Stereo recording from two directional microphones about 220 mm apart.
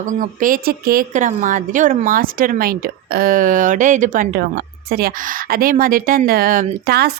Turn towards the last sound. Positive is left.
turn(degrees=-45)  # may be behind; listen again after turning